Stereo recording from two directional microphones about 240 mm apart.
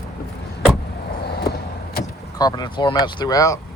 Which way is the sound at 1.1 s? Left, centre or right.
Left.